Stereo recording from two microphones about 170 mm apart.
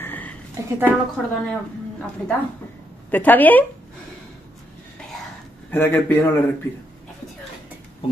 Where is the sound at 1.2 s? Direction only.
5° left (ahead or behind).